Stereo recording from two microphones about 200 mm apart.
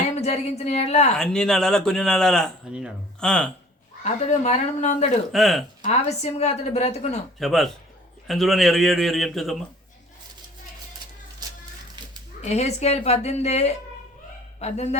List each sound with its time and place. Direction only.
0.2 s a woman's voice: 35° left (ahead or behind)
1.1 s speech: 5° left (ahead or behind)
4.0 s a woman's voice: 35° left (ahead or behind)
5.3 s speech: centre (ahead or behind)
5.8 s a woman's voice: 30° left (ahead or behind)
7.3 s speech: centre (ahead or behind)
12.4 s a woman's voice: 35° left (ahead or behind)